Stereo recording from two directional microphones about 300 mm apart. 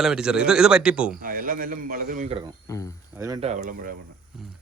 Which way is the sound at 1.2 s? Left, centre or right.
Right.